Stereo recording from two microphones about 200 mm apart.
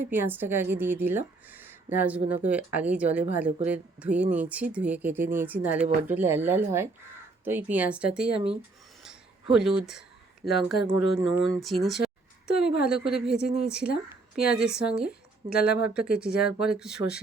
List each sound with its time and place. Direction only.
0.0 s speech: 10° right (ahead or behind)
2.2 s speech: 30° right (ahead or behind)
2.7 s speech: 5° right (ahead or behind)
9.0 s a sound: centre (ahead or behind)
10.4 s speech: centre (ahead or behind)
10.8 s speech: 15° right (ahead or behind)
11.4 s a woman's voice: centre (ahead or behind)